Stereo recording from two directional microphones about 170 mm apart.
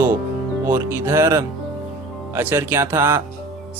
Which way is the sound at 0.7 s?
15° right (ahead or behind).